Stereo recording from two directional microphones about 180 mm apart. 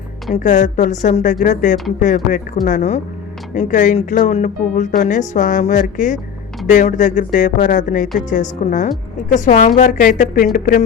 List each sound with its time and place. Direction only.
0.4 s speech: 45° left (ahead or behind)